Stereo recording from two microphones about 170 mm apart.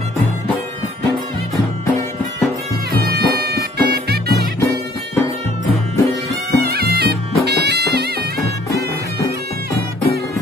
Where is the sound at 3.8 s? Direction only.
70° right (ahead or behind).